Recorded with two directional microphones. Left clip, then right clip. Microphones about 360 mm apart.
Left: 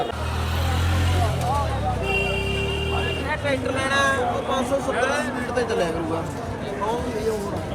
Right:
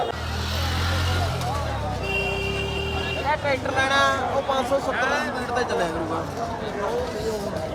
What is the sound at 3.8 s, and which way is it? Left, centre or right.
Speech, centre.